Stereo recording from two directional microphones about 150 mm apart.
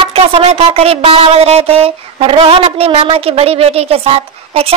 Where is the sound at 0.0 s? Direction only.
40° right (ahead or behind).